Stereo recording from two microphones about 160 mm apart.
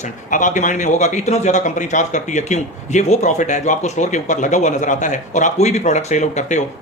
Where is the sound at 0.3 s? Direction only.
50° left (ahead or behind).